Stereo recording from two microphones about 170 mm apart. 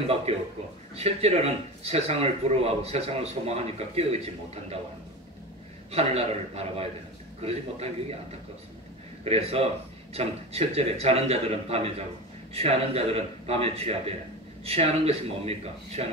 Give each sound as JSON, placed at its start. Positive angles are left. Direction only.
{"t": 0.3, "sound": "speech", "side_deg": -35}
{"t": 5.9, "sound": "speech", "side_deg": -35}
{"t": 9.2, "sound": "speech", "side_deg": -35}